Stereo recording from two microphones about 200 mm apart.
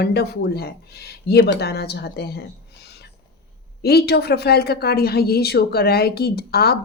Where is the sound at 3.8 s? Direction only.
55° left (ahead or behind).